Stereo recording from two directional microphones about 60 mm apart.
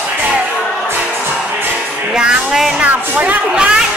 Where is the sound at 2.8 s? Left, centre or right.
Right.